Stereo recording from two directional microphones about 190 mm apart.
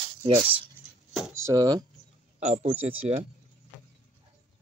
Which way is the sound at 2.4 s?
35° right (ahead or behind).